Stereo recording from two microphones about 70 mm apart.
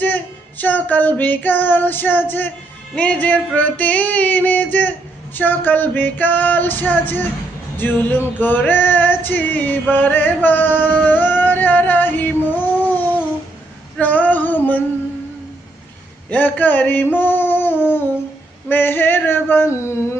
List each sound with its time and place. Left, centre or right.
0.6 s music: left
9.9 s male singing: left
16.3 s a sound: left
18.7 s male singing: left